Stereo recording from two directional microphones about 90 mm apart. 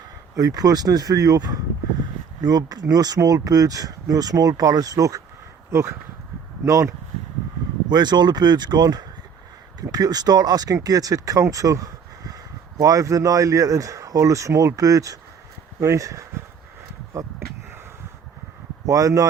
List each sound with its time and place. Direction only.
0.3 s speech: 40° right (ahead or behind)
7.9 s speech: 50° right (ahead or behind); by 16.2 s 35° right (ahead or behind)
18.9 s speech: 35° right (ahead or behind)